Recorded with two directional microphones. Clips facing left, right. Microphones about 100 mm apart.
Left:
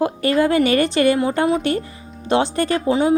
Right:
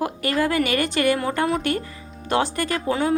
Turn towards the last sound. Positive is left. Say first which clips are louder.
# left 5 dB
turn(degrees=20)  # may be behind; listen again after turning